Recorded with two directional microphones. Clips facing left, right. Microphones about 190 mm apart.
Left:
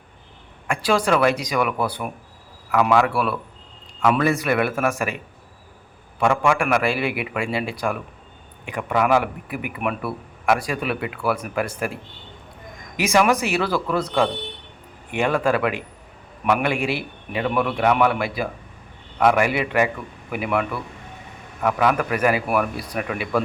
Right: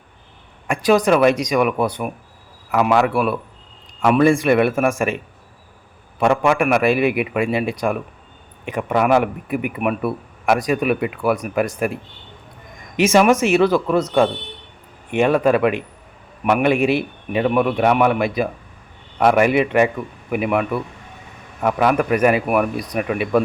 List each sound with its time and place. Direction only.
0.7 s speech: 20° right (ahead or behind)
4.0 s speech: 25° right (ahead or behind)
13.0 s speech: 25° right (ahead or behind)